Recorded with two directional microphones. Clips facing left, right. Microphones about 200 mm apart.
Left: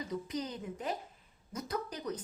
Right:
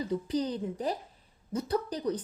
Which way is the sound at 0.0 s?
30° right (ahead or behind).